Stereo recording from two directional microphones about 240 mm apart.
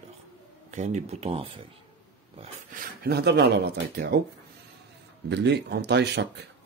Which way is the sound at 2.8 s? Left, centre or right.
Right.